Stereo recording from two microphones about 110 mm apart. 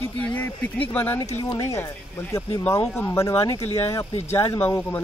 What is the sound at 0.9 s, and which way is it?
Speech, 20° left (ahead or behind).